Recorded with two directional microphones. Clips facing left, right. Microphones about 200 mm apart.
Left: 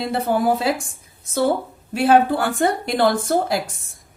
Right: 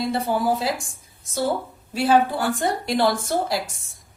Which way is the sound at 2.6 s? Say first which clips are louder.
Left 3 dB; 55° left (ahead or behind).